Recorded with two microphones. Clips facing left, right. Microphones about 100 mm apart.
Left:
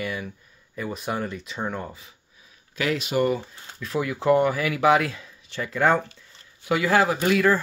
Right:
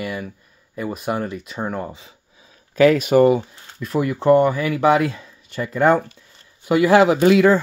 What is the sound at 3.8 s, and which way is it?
Speech, centre (ahead or behind).